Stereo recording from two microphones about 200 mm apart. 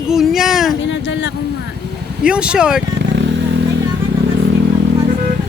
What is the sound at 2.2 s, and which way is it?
Speech, 5° right (ahead or behind).